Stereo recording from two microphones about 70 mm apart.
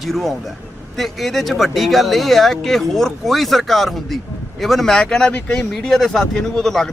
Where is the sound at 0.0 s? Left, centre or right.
Centre.